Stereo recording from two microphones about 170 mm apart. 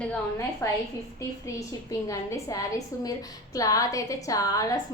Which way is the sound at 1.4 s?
20° left (ahead or behind).